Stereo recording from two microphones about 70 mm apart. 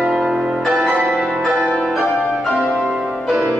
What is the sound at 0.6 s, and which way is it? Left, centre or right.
Music, centre.